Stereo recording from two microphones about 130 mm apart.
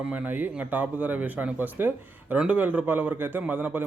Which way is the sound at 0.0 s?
10° right (ahead or behind).